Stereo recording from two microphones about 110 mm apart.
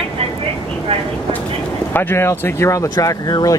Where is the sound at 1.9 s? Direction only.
20° left (ahead or behind); by 3.6 s 35° left (ahead or behind).